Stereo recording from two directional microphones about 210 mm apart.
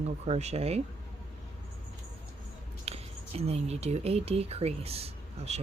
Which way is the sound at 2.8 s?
30° right (ahead or behind).